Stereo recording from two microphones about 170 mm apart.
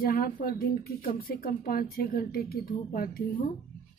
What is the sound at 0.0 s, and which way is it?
Speech, 60° left (ahead or behind).